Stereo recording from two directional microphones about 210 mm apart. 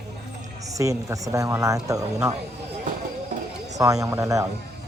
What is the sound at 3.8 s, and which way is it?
Speech, 15° right (ahead or behind).